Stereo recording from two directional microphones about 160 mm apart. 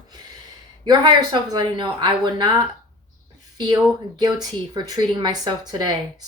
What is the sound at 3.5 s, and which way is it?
Speech, 25° right (ahead or behind).